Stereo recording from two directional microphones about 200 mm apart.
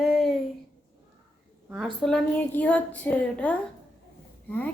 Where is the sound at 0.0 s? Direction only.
Centre (ahead or behind).